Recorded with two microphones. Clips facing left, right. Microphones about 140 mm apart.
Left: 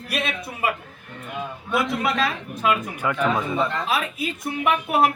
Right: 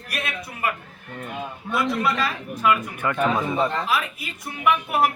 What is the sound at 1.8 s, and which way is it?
Speech, 25° left (ahead or behind).